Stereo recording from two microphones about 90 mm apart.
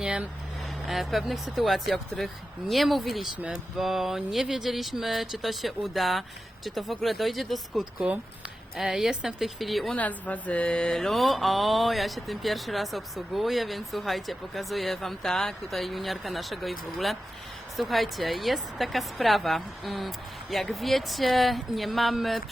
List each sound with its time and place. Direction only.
0.0 s vehicle: 10° right (ahead or behind)
0.6 s mantra: centre (ahead or behind)
7.9 s speech: 15° right (ahead or behind)
8.7 s mantra: 5° right (ahead or behind)
10.0 s mantra: 15° left (ahead or behind); by 22.4 s centre (ahead or behind)